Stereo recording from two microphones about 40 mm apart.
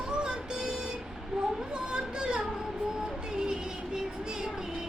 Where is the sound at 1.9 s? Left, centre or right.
Right.